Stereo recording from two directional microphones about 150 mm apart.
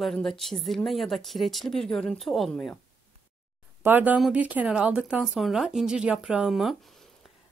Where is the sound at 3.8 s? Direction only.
10° right (ahead or behind).